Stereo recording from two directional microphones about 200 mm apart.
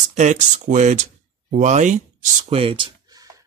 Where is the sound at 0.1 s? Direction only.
35° right (ahead or behind).